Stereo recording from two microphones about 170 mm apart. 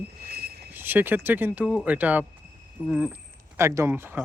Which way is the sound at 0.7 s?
10° right (ahead or behind).